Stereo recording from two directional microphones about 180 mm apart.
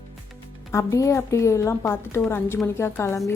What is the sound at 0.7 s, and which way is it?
A woman's voice, 15° left (ahead or behind).